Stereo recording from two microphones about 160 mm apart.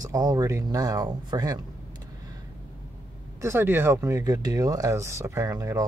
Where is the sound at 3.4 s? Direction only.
15° right (ahead or behind).